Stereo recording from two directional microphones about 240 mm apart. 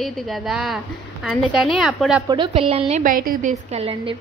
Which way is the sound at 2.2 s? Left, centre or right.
Right.